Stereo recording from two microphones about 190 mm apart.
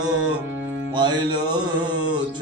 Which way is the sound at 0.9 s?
25° right (ahead or behind).